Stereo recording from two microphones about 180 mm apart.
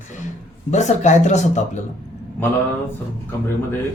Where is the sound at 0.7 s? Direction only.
40° left (ahead or behind).